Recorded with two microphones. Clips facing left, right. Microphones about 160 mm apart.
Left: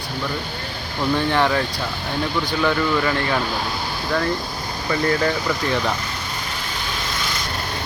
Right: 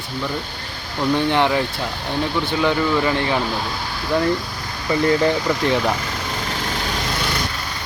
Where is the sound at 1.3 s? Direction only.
20° right (ahead or behind).